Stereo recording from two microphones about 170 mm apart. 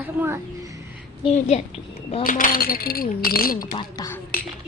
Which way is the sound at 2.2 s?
55° left (ahead or behind).